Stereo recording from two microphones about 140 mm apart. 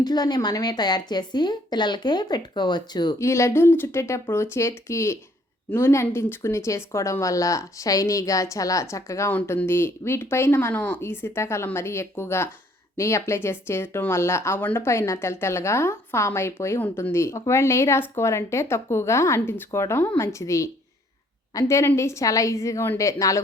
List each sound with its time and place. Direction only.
0.0 s speech: 30° left (ahead or behind)